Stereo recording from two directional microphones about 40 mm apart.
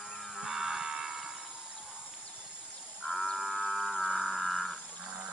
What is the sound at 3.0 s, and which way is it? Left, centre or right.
Livestock, centre.